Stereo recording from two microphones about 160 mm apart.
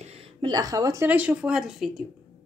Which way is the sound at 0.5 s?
25° right (ahead or behind).